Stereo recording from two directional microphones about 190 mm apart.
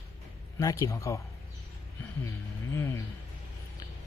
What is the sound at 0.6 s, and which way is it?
Speech, 20° left (ahead or behind).